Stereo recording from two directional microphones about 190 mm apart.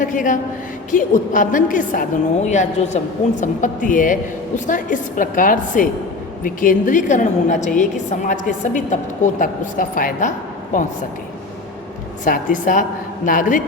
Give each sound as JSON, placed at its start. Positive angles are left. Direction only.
{"t": 0.0, "sound": "a woman's voice", "side_deg": 45}
{"t": 12.2, "sound": "a woman's voice", "side_deg": 45}